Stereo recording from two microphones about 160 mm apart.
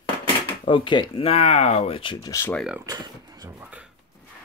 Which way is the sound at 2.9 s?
25° right (ahead or behind).